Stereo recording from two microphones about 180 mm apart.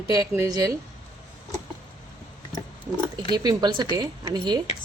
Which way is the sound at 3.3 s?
20° right (ahead or behind).